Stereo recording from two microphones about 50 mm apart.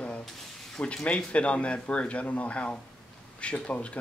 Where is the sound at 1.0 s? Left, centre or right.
Left.